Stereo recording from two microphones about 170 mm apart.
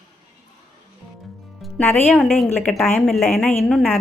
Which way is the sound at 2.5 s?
15° left (ahead or behind).